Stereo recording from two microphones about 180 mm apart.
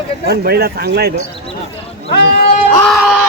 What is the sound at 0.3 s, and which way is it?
Speech, 60° right (ahead or behind).